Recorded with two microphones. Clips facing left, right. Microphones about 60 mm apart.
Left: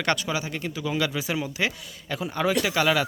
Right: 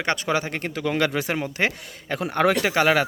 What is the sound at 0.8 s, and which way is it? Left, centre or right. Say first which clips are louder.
Speech: right 4 dB; right.